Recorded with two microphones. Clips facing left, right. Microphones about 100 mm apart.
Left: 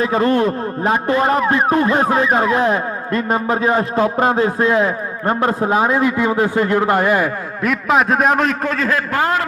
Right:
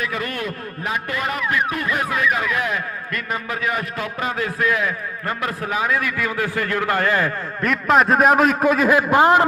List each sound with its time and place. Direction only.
0.0 s a man's voice: 30° left (ahead or behind)
7.6 s a man's voice: centre (ahead or behind); by 9.4 s 20° right (ahead or behind)